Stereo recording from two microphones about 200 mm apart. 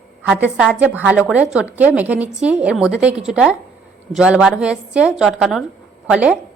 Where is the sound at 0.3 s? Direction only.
5° right (ahead or behind).